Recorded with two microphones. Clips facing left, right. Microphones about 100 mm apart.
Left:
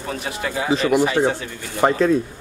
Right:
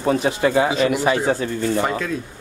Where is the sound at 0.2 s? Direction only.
30° right (ahead or behind).